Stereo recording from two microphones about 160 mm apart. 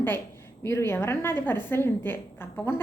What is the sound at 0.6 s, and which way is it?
A woman's voice, 15° left (ahead or behind).